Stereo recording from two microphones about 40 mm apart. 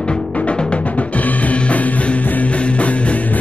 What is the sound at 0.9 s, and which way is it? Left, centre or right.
Music, left.